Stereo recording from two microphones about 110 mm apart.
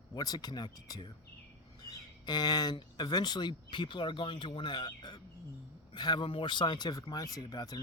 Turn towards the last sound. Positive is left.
turn(degrees=35)  # may be behind; listen again after turning